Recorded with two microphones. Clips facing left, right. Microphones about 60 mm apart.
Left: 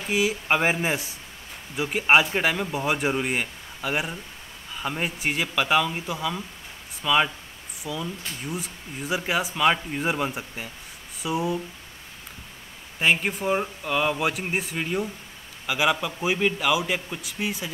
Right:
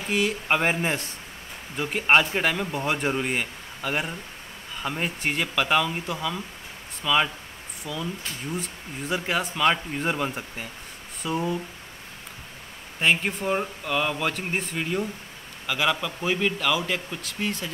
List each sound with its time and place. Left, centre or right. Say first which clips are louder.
0.0 s speech: left 1 dB; centre
13.0 s a man's voice: left 1 dB; centre